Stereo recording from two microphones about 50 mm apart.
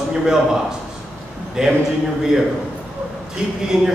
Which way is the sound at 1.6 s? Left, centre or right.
Centre.